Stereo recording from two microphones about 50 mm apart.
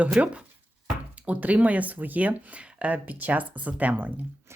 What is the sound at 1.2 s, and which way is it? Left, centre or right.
Speech, right.